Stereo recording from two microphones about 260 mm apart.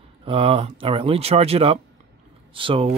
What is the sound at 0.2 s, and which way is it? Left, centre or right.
Speech, right.